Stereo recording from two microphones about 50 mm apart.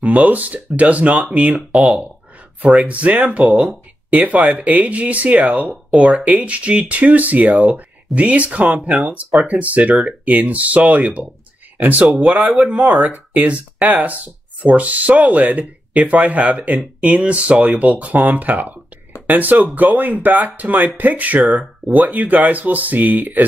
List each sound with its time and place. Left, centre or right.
0.0 s speech: right
1.7 s speech: centre
2.9 s speech: right
12.1 s speech: right
12.5 s speech: right